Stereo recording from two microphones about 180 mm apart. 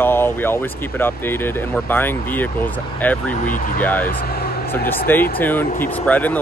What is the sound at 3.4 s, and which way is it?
Speech, 45° left (ahead or behind).